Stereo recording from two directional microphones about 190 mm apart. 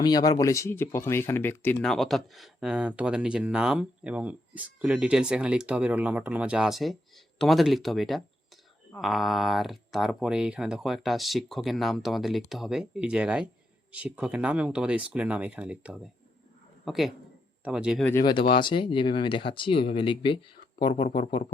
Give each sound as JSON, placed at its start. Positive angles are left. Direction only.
{"t": 0.0, "sound": "a man's voice", "side_deg": 20}
{"t": 18.0, "sound": "speech", "side_deg": 15}